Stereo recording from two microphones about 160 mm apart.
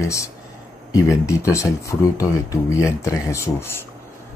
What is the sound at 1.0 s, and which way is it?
Speech, 20° left (ahead or behind).